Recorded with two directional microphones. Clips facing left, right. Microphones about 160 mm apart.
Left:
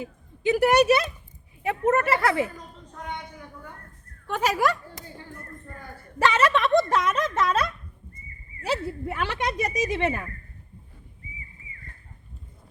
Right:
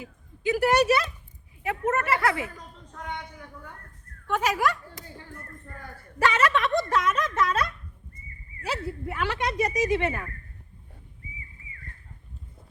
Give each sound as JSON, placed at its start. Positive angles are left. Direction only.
{"t": 0.0, "sound": "speech", "side_deg": 25}
{"t": 1.6, "sound": "speech", "side_deg": 30}
{"t": 4.3, "sound": "speech", "side_deg": 30}
{"t": 6.1, "sound": "speech", "side_deg": 25}